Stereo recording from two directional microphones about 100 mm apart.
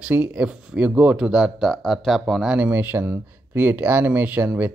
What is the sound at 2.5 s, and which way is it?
Speech, 15° right (ahead or behind).